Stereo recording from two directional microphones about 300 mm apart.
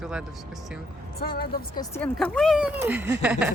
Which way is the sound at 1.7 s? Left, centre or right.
Centre.